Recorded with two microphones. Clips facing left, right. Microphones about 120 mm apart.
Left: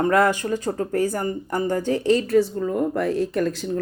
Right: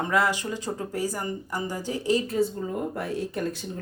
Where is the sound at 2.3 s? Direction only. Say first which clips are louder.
Left 7 dB; 85° left.